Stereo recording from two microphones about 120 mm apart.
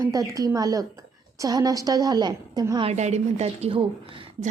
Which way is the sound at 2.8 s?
65° right (ahead or behind).